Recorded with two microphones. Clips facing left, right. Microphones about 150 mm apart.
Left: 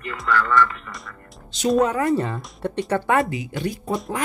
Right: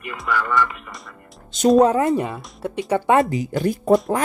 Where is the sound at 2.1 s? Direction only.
10° right (ahead or behind).